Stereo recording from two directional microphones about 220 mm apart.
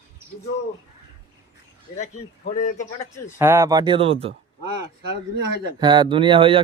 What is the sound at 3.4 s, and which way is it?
Speech, 10° right (ahead or behind).